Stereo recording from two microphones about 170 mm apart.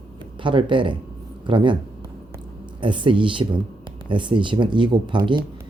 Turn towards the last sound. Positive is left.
turn(degrees=-25)  # may be behind; listen again after turning